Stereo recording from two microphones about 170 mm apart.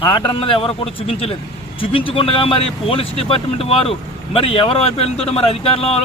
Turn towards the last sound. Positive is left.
turn(degrees=35)  # may be behind; listen again after turning